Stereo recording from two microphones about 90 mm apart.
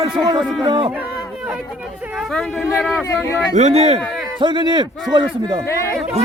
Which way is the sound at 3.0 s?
25° left (ahead or behind).